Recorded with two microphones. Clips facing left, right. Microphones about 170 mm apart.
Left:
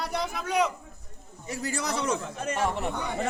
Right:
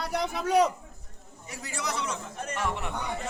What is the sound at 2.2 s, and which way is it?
Speech, 90° left.